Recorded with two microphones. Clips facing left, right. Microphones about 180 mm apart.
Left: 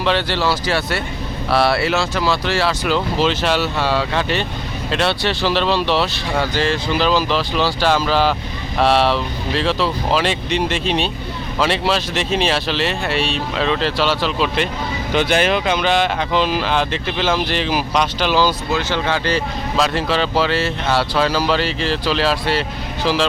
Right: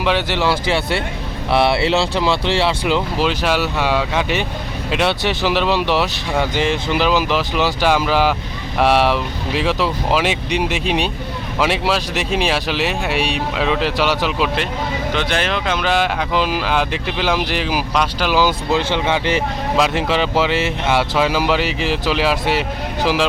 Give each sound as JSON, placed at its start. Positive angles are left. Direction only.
{"t": 0.0, "sound": "speech", "side_deg": -15}
{"t": 3.2, "sound": "speech", "side_deg": -10}
{"t": 15.1, "sound": "speech", "side_deg": 5}
{"t": 18.7, "sound": "speech", "side_deg": -25}